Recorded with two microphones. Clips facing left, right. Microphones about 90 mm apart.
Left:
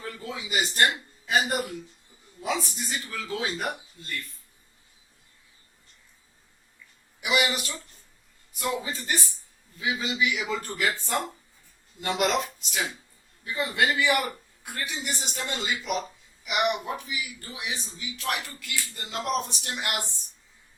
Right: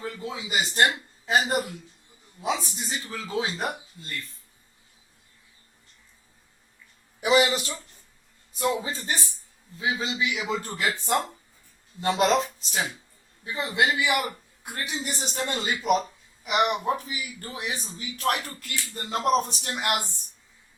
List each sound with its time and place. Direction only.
0.0 s a man's voice: 20° right (ahead or behind)
7.2 s speech: 35° right (ahead or behind)
11.9 s speech: 35° right (ahead or behind)
13.4 s a man's voice: 20° right (ahead or behind)
15.0 s speech: 40° right (ahead or behind)